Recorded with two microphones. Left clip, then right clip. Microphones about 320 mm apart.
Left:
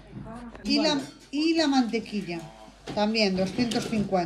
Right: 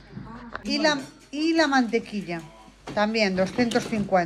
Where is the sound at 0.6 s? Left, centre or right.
Centre.